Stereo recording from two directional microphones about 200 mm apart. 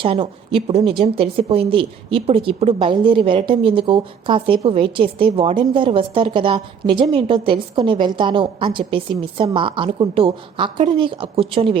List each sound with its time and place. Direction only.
0.0 s a woman's voice: 25° right (ahead or behind)